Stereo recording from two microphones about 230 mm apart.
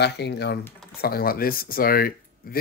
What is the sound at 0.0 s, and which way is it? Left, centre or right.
Speech, left.